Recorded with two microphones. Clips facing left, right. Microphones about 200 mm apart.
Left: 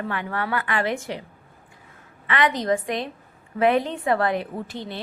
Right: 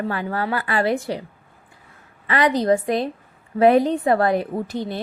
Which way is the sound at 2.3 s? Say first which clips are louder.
Right 4 dB; 35° right (ahead or behind).